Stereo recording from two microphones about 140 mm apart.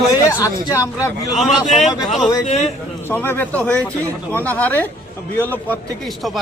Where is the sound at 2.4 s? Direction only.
55° left (ahead or behind).